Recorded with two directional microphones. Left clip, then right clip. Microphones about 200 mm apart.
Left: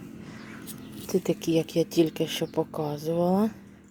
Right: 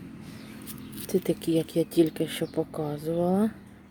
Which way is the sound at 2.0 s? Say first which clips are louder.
Even; centre (ahead or behind).